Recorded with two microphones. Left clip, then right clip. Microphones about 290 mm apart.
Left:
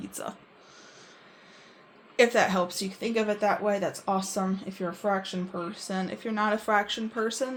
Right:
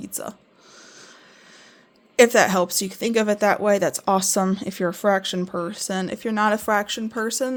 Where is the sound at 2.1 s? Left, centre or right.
Right.